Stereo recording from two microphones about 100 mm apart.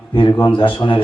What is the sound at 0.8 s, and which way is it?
Speech, 55° left (ahead or behind).